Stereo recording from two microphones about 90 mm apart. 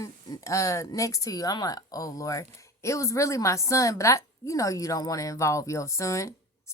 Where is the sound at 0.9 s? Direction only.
40° left (ahead or behind).